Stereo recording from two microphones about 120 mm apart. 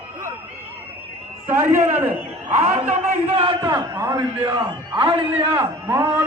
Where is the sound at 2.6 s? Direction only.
65° right (ahead or behind).